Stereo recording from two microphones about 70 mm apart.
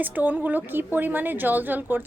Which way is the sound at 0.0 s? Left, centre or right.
Right.